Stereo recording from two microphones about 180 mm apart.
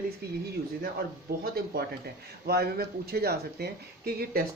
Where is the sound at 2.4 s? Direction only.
60° right (ahead or behind).